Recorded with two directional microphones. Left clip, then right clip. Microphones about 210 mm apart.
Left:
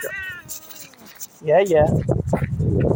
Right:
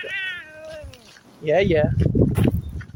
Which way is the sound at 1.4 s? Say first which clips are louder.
Left 3 dB; 10° left (ahead or behind).